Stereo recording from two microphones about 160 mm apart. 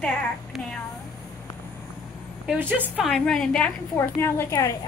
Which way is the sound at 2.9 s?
Centre (ahead or behind).